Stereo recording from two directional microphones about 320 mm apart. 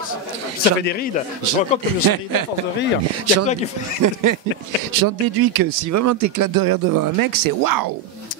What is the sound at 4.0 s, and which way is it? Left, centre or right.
Speech, right.